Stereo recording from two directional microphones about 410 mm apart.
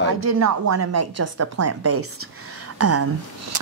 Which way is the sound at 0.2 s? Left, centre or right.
Right.